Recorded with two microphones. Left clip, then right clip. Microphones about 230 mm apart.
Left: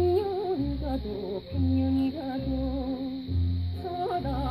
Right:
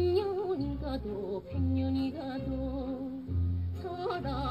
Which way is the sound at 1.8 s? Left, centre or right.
Left.